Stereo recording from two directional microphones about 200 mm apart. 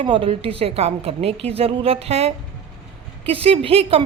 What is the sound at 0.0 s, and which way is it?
A woman's voice, 25° right (ahead or behind).